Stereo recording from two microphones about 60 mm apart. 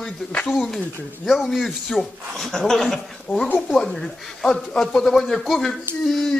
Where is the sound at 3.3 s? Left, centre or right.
Left.